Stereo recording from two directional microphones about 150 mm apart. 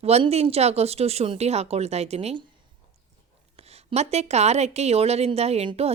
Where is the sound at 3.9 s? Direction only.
45° right (ahead or behind).